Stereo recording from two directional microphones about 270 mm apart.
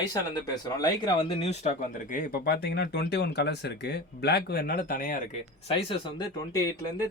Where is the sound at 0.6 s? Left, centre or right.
Centre.